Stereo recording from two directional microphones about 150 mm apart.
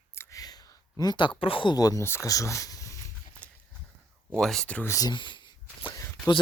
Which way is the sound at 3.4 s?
10° left (ahead or behind).